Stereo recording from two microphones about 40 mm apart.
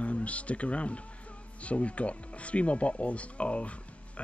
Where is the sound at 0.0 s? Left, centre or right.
Left.